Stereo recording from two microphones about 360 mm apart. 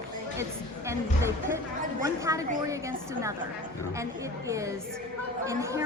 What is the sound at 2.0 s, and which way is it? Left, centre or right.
A woman's voice, centre.